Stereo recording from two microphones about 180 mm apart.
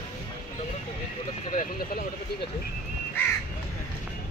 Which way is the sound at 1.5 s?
45° left (ahead or behind).